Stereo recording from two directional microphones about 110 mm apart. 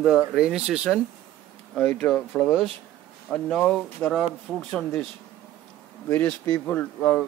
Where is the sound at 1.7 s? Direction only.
10° left (ahead or behind).